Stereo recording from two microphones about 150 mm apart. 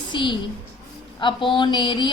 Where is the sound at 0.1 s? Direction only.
35° left (ahead or behind).